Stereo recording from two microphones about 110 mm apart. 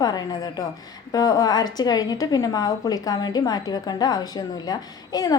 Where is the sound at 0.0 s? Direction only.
35° left (ahead or behind).